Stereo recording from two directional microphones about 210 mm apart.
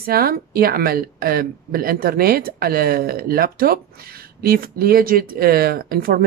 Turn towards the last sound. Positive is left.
turn(degrees=-45)  # may be behind; listen again after turning